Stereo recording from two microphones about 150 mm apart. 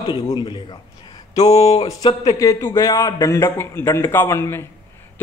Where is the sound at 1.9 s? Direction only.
25° left (ahead or behind).